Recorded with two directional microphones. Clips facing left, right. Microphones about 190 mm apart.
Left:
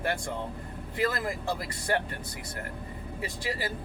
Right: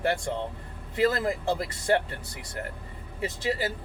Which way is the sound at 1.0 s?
25° right (ahead or behind).